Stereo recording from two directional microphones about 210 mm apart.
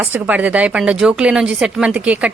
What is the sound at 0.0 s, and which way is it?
A woman's voice, 5° right (ahead or behind).